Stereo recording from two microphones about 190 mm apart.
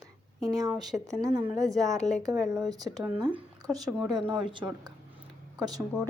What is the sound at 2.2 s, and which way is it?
A woman's voice, 20° right (ahead or behind).